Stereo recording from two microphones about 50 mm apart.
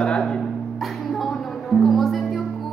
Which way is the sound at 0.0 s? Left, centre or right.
Left.